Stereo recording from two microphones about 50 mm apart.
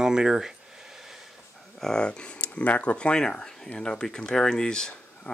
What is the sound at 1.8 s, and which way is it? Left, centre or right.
Speech, centre.